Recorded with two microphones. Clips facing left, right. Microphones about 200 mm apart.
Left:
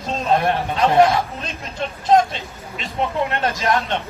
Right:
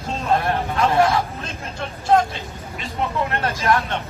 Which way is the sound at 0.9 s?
20° left (ahead or behind).